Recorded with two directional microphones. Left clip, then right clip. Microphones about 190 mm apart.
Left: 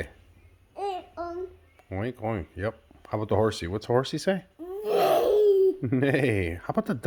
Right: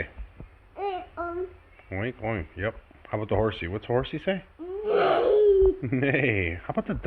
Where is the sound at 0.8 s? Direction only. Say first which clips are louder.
Right 1 dB; 40° left (ahead or behind).